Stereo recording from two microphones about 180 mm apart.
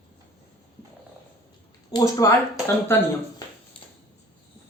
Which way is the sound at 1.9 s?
20° left (ahead or behind).